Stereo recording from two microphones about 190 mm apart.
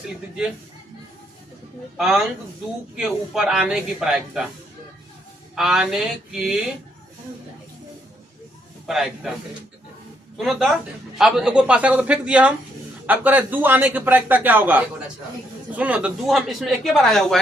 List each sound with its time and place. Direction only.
2.0 s speech: centre (ahead or behind)
5.5 s speech: 5° right (ahead or behind)
8.9 s speech: centre (ahead or behind)
10.3 s a man's voice: centre (ahead or behind)